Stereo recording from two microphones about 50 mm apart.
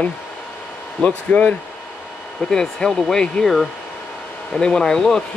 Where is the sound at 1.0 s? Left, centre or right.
Left.